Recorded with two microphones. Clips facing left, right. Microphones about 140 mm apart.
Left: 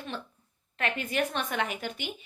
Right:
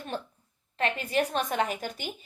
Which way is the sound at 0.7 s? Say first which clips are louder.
Right 2 dB; 35° right (ahead or behind).